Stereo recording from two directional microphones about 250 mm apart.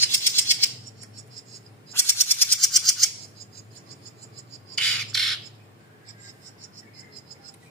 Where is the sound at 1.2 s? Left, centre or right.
Right.